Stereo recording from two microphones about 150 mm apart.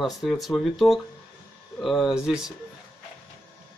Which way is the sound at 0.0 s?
Centre (ahead or behind).